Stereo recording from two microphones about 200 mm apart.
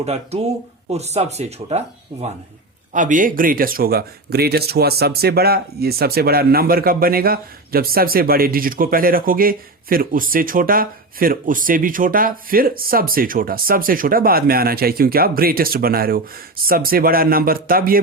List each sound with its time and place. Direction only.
0.0 s speech: 30° right (ahead or behind)
2.9 s speech: 40° right (ahead or behind)